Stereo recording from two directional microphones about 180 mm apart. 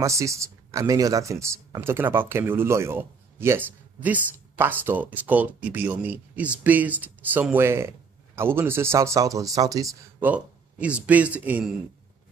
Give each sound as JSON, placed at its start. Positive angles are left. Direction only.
{"t": 0.0, "sound": "speech", "side_deg": -15}
{"t": 10.3, "sound": "speech", "side_deg": -5}